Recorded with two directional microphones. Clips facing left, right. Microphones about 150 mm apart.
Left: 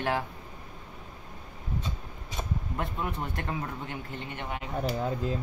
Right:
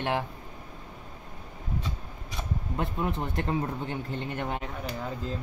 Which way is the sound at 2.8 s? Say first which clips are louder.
Right 4 dB; 25° right (ahead or behind).